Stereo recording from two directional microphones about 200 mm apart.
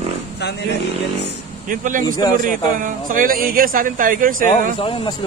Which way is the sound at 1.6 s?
40° right (ahead or behind).